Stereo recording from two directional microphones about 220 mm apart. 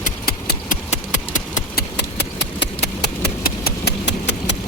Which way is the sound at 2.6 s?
50° left (ahead or behind).